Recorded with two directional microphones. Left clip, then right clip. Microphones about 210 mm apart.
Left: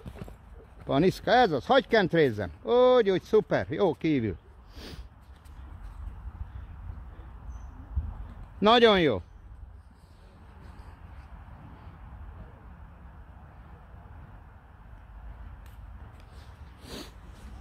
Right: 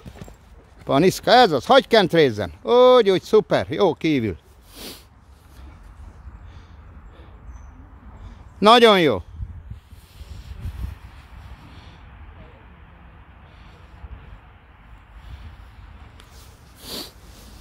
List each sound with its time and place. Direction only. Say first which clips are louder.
0.8 s speech: right 8 dB; 30° right (ahead or behind)
8.5 s speech: right 8 dB; 25° right (ahead or behind)
16.8 s sniff: right 10 dB; 20° right (ahead or behind)